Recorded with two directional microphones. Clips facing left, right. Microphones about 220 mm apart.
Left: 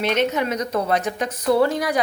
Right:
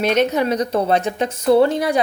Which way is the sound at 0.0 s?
40° right (ahead or behind).